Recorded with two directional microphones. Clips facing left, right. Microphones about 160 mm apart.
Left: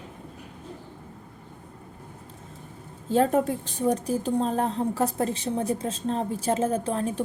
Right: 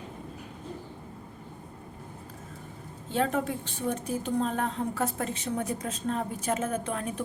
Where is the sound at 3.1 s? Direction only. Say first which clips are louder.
Left 6 dB; 40° left (ahead or behind).